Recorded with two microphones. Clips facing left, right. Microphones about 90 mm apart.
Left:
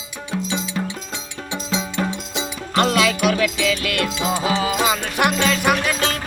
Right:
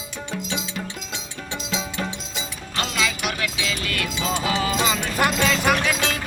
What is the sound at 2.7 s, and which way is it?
Music, 50° left (ahead or behind).